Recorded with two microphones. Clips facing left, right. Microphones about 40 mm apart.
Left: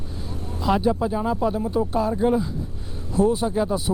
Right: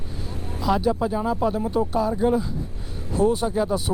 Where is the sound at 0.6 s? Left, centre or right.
Centre.